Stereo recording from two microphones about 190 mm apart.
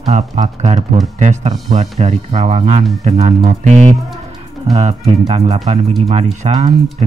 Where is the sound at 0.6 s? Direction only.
40° right (ahead or behind).